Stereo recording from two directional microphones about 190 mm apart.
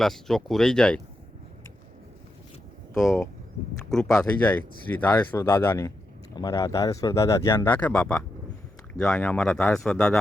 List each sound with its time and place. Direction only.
0.0 s speech: centre (ahead or behind)
3.0 s speech: centre (ahead or behind)